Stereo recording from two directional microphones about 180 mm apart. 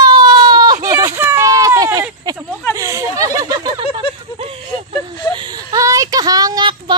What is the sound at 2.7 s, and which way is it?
Speech, 20° right (ahead or behind).